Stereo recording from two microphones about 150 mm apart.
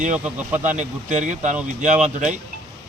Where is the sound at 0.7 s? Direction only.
55° right (ahead or behind).